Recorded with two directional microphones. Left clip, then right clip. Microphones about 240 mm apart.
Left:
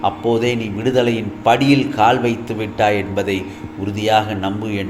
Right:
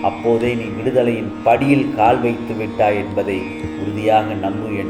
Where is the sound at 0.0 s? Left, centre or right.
Left.